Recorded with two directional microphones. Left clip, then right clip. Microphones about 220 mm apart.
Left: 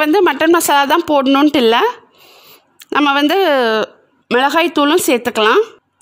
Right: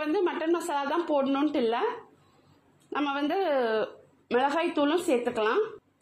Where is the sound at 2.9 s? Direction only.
50° left (ahead or behind).